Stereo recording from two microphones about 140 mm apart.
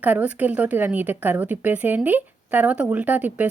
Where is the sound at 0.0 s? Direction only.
10° right (ahead or behind).